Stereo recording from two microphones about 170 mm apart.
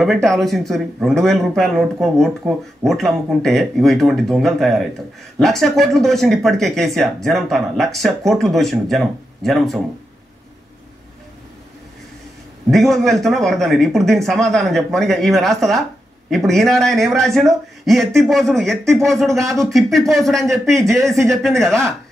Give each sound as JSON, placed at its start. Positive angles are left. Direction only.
{"t": 0.0, "sound": "speech", "side_deg": 0}
{"t": 12.7, "sound": "speech", "side_deg": 0}
{"t": 20.6, "sound": "speech", "side_deg": -15}
{"t": 20.9, "sound": "speech", "side_deg": 0}